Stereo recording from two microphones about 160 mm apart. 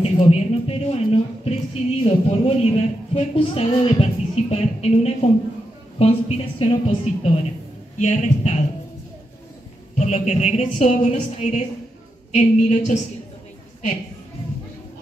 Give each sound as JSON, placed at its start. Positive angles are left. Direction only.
{"t": 0.0, "sound": "speech", "side_deg": 40}
{"t": 8.0, "sound": "a woman's voice", "side_deg": 50}
{"t": 9.9, "sound": "a woman's voice", "side_deg": 45}